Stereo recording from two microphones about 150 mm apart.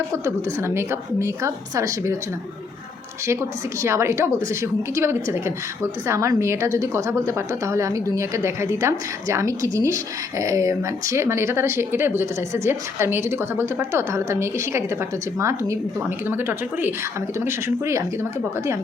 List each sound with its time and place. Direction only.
0.3 s a woman's voice: 15° right (ahead or behind)
3.8 s a woman's voice: 20° right (ahead or behind)